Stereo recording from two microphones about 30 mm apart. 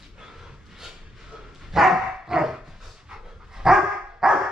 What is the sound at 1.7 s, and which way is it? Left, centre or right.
Dog, centre.